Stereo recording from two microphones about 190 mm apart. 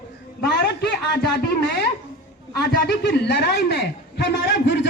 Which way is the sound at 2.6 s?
60° left (ahead or behind).